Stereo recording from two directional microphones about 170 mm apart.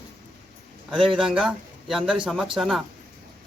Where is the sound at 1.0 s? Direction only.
30° right (ahead or behind).